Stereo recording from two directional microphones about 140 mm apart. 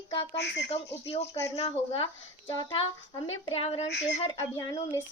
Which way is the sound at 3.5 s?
45° left (ahead or behind).